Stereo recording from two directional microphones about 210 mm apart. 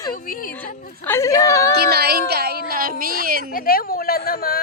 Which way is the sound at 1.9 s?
50° right (ahead or behind).